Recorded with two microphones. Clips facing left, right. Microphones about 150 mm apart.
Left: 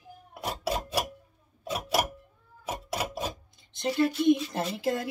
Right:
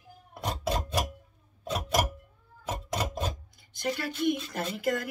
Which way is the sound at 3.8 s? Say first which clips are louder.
Left 5 dB; 25° left (ahead or behind).